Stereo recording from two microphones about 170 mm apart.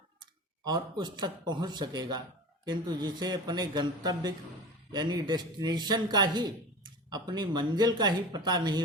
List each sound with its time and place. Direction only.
0.6 s a man's voice: 25° right (ahead or behind)